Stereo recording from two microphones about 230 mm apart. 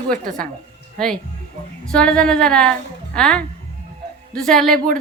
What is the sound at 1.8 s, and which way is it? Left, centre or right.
A woman's voice, centre.